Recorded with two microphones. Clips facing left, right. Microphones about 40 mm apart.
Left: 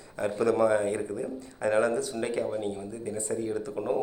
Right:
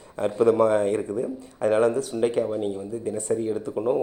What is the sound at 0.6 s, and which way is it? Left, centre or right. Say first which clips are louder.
Speech: right 4 dB; right.